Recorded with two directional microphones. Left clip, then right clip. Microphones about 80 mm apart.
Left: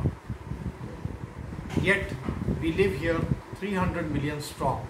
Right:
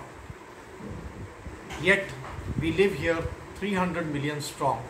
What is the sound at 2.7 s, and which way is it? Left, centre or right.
A man's voice, right.